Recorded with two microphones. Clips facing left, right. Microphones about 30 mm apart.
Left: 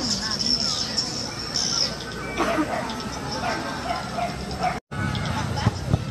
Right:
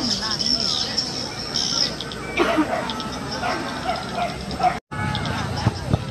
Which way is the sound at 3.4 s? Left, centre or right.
Right.